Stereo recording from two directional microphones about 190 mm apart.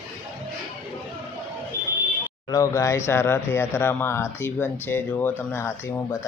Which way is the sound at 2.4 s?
15° left (ahead or behind).